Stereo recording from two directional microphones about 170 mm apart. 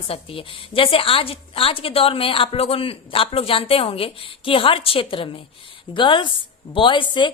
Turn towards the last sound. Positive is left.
turn(degrees=30)  # may be behind; listen again after turning